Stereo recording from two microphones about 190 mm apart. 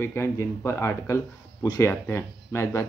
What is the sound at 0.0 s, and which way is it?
Speech, 15° left (ahead or behind).